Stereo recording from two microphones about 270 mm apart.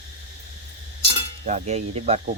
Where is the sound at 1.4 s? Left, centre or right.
Right.